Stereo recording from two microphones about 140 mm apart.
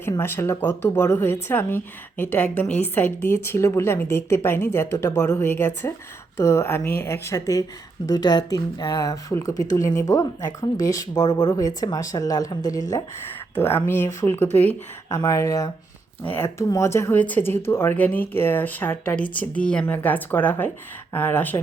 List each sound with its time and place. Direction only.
0.0 s speech: 15° left (ahead or behind)
13.8 s speech: 15° left (ahead or behind)